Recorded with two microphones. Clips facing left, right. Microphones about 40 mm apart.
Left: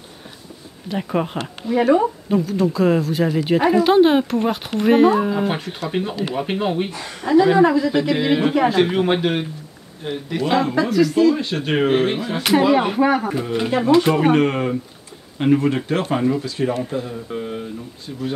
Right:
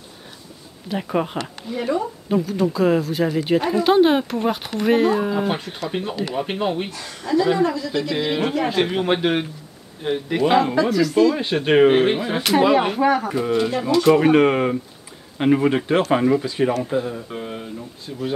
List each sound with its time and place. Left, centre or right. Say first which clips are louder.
0.8 s speech: left 1 dB; centre
1.8 s speech: left 7 dB; left
2.2 s speech: left 1 dB; centre
6.9 s speech: left 5 dB; left; by 9.3 s centre
10.0 s speech: right 3 dB; right
10.6 s speech: left 1 dB; centre
11.3 s speech: right 4 dB; right
12.7 s speech: left 1 dB; centre
13.7 s speech: left 4 dB; left
14.3 s speech: right 2 dB; centre
17.3 s a sound: left 3 dB; centre